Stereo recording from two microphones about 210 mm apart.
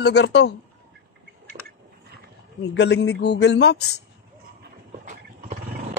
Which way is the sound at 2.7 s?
55° left (ahead or behind).